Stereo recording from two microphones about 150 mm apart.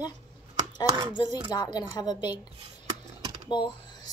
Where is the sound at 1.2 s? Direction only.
25° left (ahead or behind).